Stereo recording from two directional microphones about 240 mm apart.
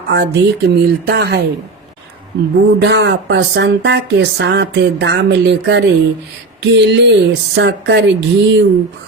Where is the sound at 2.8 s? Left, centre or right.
Right.